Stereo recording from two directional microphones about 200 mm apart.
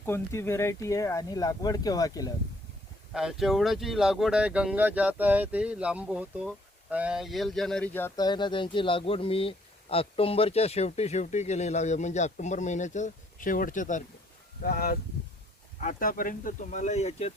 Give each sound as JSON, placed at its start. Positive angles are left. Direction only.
{"t": 0.0, "sound": "speech", "side_deg": 10}
{"t": 3.1, "sound": "speech", "side_deg": 0}